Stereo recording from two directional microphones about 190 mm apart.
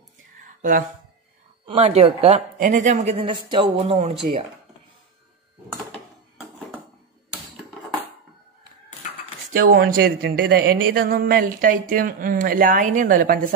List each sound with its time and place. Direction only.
0.6 s speech: 45° right (ahead or behind)
1.7 s speech: 30° right (ahead or behind)
3.2 s speech: 25° right (ahead or behind)
9.5 s a woman's voice: 50° right (ahead or behind)